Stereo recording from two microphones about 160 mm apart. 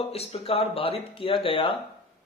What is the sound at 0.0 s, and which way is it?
Speech, 40° left (ahead or behind).